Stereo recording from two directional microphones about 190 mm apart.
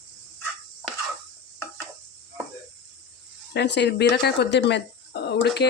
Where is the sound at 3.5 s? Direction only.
65° left (ahead or behind).